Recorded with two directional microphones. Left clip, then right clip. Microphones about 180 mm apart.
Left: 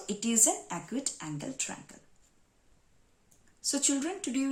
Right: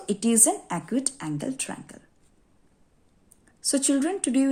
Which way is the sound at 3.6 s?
40° right (ahead or behind).